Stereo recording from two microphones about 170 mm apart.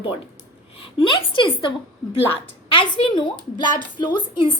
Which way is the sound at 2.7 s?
30° left (ahead or behind).